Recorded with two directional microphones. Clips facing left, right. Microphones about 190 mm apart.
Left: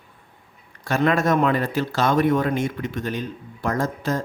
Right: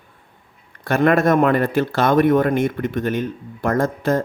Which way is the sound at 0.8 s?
55° right (ahead or behind).